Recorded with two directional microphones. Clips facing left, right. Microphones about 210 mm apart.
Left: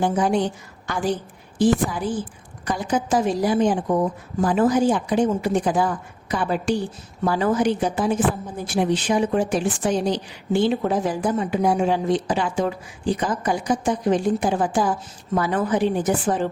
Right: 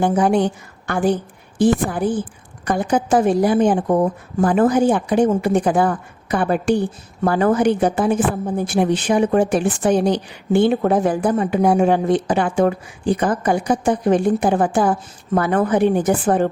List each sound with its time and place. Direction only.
0.0 s a woman's voice: 55° right (ahead or behind)